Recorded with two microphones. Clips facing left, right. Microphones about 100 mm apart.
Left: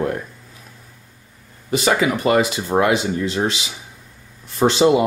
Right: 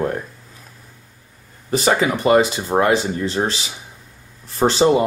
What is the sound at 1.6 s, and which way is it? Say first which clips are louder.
Speech: even; 35° right (ahead or behind).